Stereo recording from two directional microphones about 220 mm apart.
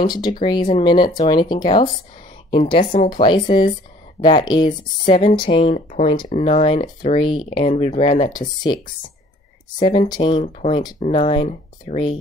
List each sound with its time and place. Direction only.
0.0 s speech: 20° left (ahead or behind)
7.2 s speech: 20° left (ahead or behind)
9.8 s speech: 20° left (ahead or behind)